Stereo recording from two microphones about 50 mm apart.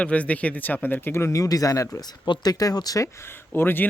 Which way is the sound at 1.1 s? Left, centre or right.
Left.